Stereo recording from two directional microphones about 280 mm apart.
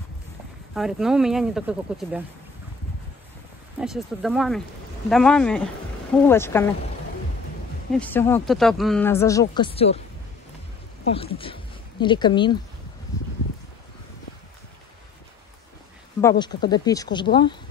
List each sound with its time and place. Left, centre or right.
0.7 s speech: centre
3.8 s speech: centre
7.9 s speech: centre
11.1 s speech: centre
16.2 s speech: centre